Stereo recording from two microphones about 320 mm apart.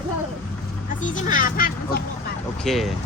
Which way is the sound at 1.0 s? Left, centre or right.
Left.